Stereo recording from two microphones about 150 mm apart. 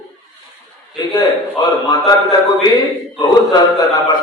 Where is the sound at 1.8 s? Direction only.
25° left (ahead or behind).